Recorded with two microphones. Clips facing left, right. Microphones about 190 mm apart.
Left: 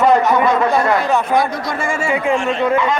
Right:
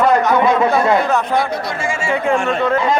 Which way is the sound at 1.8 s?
55° left (ahead or behind).